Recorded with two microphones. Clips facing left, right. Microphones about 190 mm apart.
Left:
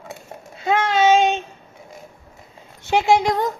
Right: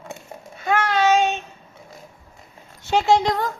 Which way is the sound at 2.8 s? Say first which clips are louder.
Left 1 dB; 15° left (ahead or behind).